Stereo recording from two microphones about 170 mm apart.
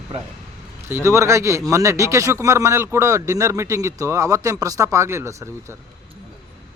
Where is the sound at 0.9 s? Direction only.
15° right (ahead or behind).